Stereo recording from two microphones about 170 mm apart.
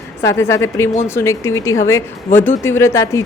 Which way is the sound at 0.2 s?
15° left (ahead or behind).